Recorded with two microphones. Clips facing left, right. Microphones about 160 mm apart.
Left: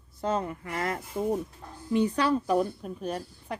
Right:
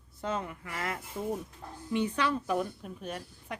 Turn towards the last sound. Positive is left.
turn(degrees=35)  # may be behind; listen again after turning